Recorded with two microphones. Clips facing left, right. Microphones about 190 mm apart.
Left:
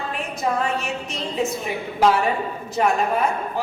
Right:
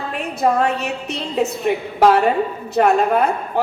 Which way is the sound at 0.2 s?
65° right (ahead or behind).